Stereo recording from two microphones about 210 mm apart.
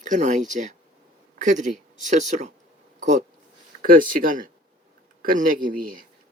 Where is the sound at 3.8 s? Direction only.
40° right (ahead or behind).